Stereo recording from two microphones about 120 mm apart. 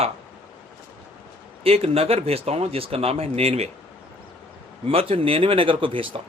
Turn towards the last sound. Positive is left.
turn(degrees=-45)  # may be behind; listen again after turning